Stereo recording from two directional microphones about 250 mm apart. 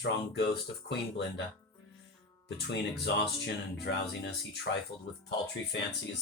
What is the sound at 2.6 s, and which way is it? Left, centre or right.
Speech, left.